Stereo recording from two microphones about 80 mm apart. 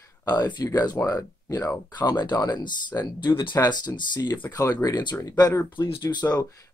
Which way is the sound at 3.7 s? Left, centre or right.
Left.